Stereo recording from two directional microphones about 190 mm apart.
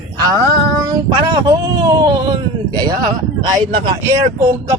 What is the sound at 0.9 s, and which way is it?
Speech, 25° right (ahead or behind).